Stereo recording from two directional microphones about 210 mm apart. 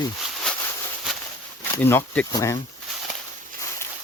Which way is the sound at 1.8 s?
10° left (ahead or behind).